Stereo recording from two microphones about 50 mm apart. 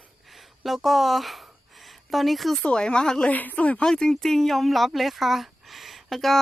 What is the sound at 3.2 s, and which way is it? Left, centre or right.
Speech, left.